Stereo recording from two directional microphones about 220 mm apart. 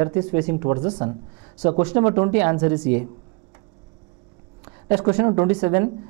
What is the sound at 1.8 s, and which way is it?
Speech, 15° right (ahead or behind).